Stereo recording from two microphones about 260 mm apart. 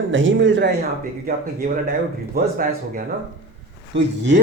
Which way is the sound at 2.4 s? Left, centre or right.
Right.